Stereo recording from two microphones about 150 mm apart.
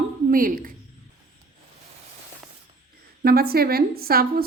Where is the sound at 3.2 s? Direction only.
90° right.